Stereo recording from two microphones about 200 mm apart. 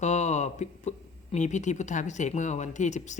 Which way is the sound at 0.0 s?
35° left (ahead or behind).